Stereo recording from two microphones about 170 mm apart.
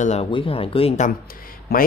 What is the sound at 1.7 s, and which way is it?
Speech, 65° left (ahead or behind).